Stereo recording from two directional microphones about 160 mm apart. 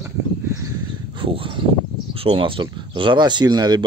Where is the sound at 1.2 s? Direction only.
35° right (ahead or behind).